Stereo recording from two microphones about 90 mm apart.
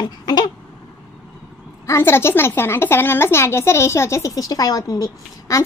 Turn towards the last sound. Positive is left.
turn(degrees=40)  # may be behind; listen again after turning